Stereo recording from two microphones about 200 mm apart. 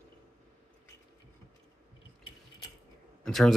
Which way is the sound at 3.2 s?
Centre (ahead or behind).